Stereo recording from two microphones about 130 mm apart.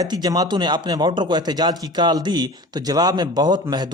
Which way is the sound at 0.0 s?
30° right (ahead or behind).